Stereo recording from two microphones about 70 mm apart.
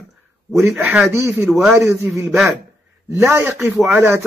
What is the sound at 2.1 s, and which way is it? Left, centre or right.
Speech, right.